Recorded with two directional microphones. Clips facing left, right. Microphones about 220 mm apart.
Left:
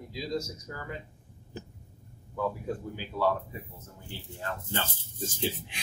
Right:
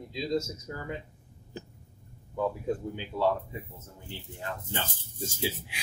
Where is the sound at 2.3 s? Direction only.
20° right (ahead or behind).